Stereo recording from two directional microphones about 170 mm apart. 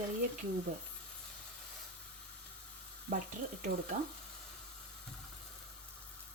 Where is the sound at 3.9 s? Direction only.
45° right (ahead or behind).